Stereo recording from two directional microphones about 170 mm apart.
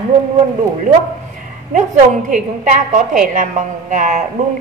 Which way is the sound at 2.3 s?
50° right (ahead or behind).